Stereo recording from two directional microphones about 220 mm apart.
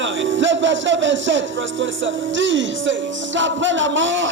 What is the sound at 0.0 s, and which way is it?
Music, 55° right (ahead or behind).